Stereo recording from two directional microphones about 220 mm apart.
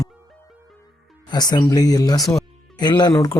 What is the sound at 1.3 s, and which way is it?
Speech, 20° left (ahead or behind).